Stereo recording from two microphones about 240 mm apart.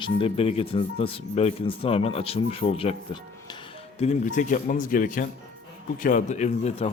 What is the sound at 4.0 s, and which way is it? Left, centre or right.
Speech, left.